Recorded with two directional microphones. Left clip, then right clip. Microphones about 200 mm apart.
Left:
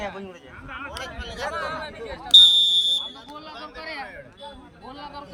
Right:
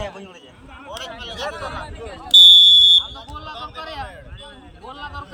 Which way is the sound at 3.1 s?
15° right (ahead or behind).